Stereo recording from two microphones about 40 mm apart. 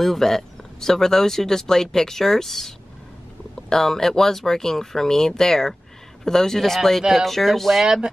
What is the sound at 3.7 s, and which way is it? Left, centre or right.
Speech, centre.